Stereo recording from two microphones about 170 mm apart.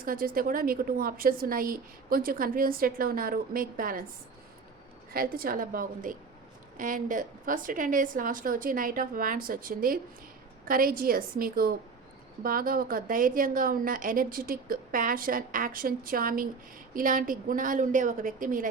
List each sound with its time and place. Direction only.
0.0 s a woman's voice: 55° right (ahead or behind)
5.1 s a woman's voice: 60° right (ahead or behind)